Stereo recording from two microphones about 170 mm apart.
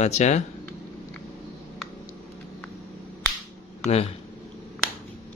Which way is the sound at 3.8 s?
35° left (ahead or behind).